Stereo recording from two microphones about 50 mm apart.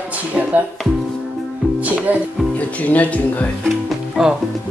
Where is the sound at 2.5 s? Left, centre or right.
Left.